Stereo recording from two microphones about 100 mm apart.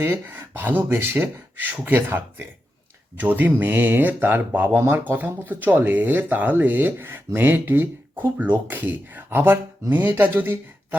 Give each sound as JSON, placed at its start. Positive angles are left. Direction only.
{"t": 0.0, "sound": "speech", "side_deg": -20}